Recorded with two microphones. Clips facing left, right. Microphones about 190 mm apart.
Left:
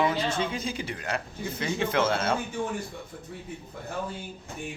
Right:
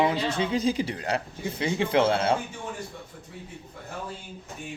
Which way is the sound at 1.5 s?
15° right (ahead or behind).